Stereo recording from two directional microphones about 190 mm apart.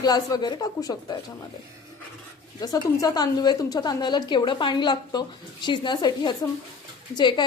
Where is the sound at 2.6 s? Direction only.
20° left (ahead or behind).